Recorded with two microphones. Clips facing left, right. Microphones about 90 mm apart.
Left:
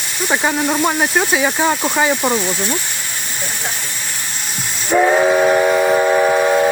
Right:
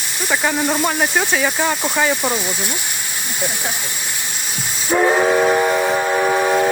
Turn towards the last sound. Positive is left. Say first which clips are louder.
# left 3 dB
turn(degrees=0)  # may be behind; listen again after turning